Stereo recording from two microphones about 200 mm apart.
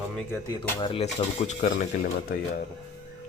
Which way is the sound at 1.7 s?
50° left (ahead or behind).